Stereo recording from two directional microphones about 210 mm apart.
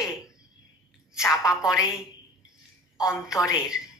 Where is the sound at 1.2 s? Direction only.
15° left (ahead or behind).